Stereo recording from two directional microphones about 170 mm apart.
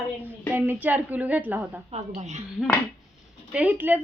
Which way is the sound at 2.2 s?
40° right (ahead or behind).